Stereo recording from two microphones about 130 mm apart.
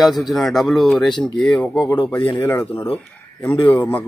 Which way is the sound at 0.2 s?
Centre (ahead or behind).